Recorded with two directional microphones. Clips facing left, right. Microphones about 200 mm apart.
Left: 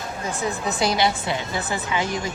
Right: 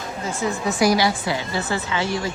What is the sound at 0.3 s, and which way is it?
A woman's voice, 20° left (ahead or behind).